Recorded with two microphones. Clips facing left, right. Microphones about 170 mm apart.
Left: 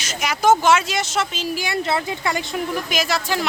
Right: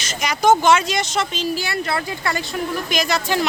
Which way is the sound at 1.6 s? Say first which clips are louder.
Left 1 dB; 20° left (ahead or behind).